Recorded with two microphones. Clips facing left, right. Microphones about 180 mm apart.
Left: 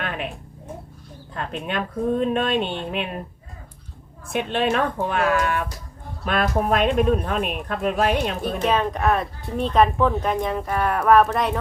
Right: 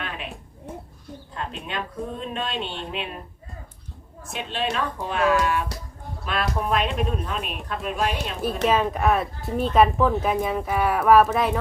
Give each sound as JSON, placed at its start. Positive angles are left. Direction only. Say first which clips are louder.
{"t": 0.0, "sound": "a sound", "louder": "left 5 dB", "side_deg": 55}
{"t": 1.3, "sound": "speech", "louder": "left 5 dB", "side_deg": 55}
{"t": 4.3, "sound": "a woman's voice", "louder": "left 6 dB", "side_deg": 55}
{"t": 8.6, "sound": "a woman's voice", "louder": "even", "side_deg": -5}